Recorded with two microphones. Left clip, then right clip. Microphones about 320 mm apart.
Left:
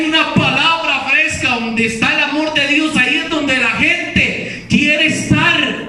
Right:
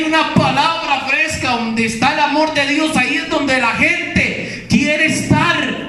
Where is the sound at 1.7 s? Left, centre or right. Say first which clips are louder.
Left 1 dB; centre.